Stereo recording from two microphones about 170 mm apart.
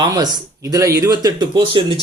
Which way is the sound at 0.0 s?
25° right (ahead or behind).